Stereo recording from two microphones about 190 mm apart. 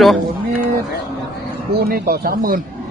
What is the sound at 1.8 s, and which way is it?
Speech, 55° right (ahead or behind).